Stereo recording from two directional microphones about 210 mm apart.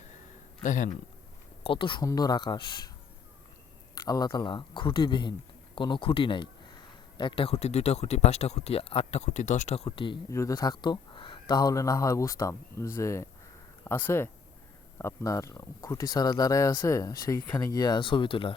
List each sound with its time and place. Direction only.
0.6 s a man's voice: 40° left (ahead or behind)
1.6 s speech: 25° left (ahead or behind)
3.9 s speech: 20° left (ahead or behind)